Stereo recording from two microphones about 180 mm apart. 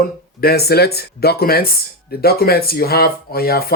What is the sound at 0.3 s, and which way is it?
Speech, 60° left (ahead or behind).